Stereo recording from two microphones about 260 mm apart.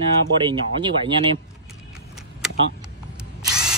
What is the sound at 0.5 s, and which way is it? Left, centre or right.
Speech, centre.